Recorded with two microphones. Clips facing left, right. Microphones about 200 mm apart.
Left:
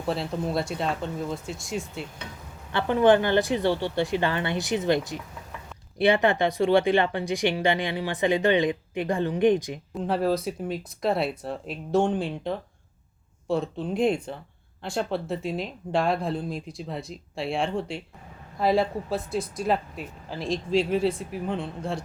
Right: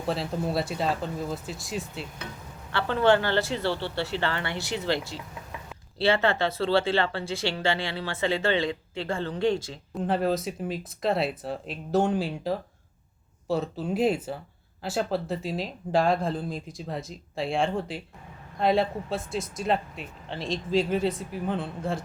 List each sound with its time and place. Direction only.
0.1 s speech: centre (ahead or behind)
2.7 s speech: 15° left (ahead or behind)
9.9 s speech: centre (ahead or behind)